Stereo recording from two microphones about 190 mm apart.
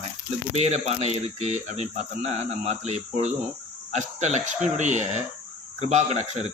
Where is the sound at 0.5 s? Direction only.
35° right (ahead or behind).